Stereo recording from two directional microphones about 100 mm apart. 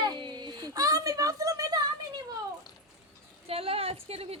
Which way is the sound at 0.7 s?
35° right (ahead or behind).